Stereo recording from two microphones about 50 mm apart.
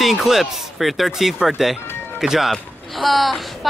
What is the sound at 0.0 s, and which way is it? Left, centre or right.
Speech, centre.